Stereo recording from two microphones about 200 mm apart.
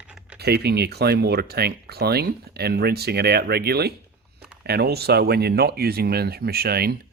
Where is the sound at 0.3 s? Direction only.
55° right (ahead or behind).